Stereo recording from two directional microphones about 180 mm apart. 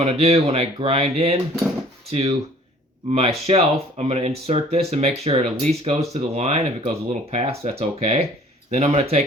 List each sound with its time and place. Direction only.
0.0 s speech: 35° right (ahead or behind)